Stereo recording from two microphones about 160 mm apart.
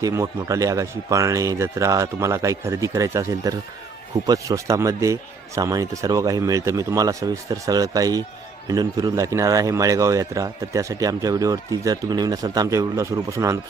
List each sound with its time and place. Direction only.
0.0 s speech: 20° right (ahead or behind)